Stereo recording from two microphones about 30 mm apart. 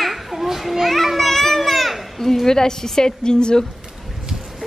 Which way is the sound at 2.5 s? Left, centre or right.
Centre.